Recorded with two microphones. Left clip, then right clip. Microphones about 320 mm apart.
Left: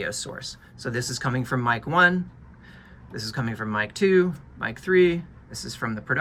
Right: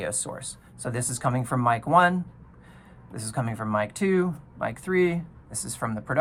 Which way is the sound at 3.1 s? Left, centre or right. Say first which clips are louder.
Left 1 dB; centre.